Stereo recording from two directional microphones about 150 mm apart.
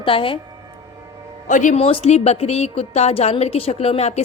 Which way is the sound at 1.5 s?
55° left (ahead or behind).